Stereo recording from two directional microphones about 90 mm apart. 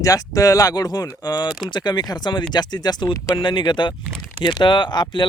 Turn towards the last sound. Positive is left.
turn(degrees=55)  # may be behind; listen again after turning